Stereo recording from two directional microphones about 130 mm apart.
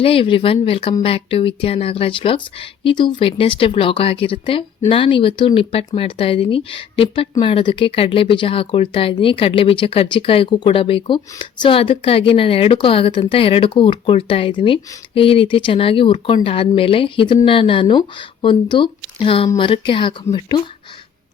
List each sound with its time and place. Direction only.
0.0 s speech: 45° left (ahead or behind)